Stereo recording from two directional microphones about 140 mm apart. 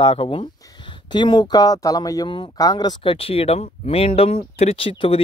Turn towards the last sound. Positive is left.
turn(degrees=40)  # may be behind; listen again after turning